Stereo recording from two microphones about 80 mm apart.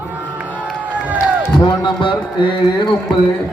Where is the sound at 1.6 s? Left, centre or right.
Left.